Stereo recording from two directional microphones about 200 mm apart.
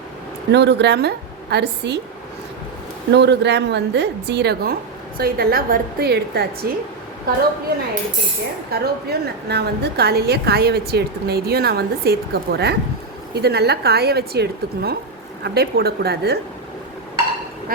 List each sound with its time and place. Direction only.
0.5 s a woman's voice: 60° right (ahead or behind)
3.1 s a woman's voice: 60° right (ahead or behind)
8.7 s a woman's voice: 55° right (ahead or behind)